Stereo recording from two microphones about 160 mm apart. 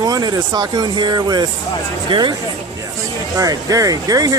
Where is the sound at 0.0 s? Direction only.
25° right (ahead or behind).